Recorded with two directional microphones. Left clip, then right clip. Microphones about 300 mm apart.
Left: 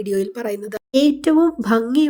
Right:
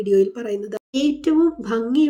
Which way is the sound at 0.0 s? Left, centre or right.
Left.